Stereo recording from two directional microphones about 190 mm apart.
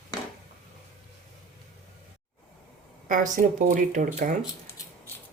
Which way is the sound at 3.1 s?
40° right (ahead or behind).